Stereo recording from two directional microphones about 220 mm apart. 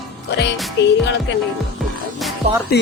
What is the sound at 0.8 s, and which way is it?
Speech, 55° left (ahead or behind).